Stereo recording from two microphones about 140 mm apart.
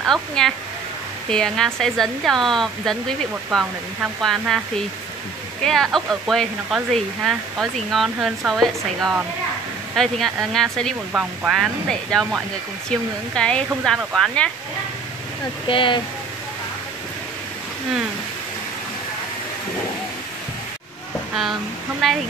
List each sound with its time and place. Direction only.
0.0 s speech: centre (ahead or behind)
5.6 s speech: 5° left (ahead or behind)
15.7 s speech: 40° left (ahead or behind)
22.0 s speech: centre (ahead or behind)